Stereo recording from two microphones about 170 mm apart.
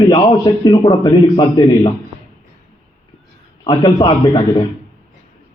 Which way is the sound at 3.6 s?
25° left (ahead or behind).